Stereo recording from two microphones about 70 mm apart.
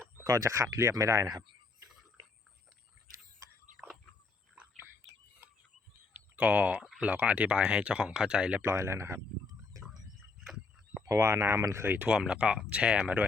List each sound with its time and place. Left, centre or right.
0.3 s speech: right
5.4 s a sound: right
6.1 s speech: right
8.6 s speech: right
9.7 s a sound: right
10.4 s a sound: centre
11.1 s speech: right
11.9 s speech: right
12.1 s speech: centre